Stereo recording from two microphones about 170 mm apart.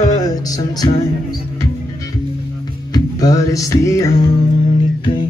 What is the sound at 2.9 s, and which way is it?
Music, 20° left (ahead or behind).